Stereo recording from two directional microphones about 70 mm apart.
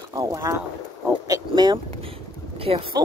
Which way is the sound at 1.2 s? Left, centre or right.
Right.